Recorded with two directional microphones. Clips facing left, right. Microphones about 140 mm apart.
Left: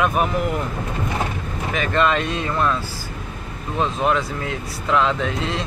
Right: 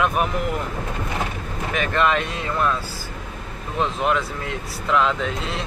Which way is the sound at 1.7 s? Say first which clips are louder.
Left 1 dB; 5° right (ahead or behind).